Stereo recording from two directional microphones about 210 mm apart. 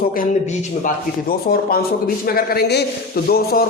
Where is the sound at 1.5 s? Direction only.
45° left (ahead or behind).